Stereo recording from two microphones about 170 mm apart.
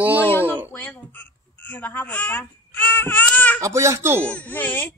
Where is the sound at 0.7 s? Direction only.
10° left (ahead or behind).